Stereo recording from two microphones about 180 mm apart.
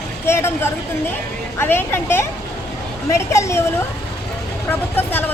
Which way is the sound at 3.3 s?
15° left (ahead or behind).